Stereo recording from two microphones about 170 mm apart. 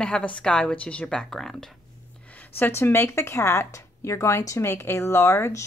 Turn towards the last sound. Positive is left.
turn(degrees=15)  # may be behind; listen again after turning